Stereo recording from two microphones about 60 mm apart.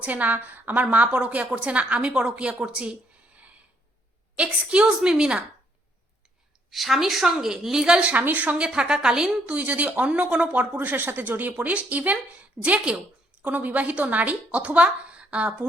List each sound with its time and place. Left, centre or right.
0.0 s a woman's voice: right
4.9 s speech: centre
6.7 s speech: centre
8.1 s speech: right
8.6 s speech: centre
9.5 s speech: right
10.8 s speech: right